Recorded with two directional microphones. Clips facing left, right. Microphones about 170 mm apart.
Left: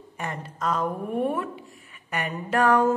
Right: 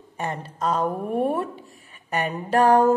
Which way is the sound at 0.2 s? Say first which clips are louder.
Right 3 dB; 30° right (ahead or behind).